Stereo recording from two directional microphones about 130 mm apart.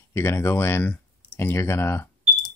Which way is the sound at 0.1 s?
20° left (ahead or behind).